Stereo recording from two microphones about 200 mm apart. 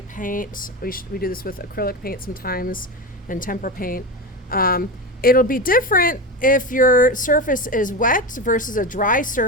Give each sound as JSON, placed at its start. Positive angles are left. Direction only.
{"t": 0.1, "sound": "a woman's voice", "side_deg": 40}